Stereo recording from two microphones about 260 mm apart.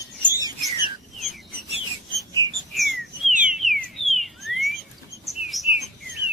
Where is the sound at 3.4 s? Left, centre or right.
Centre.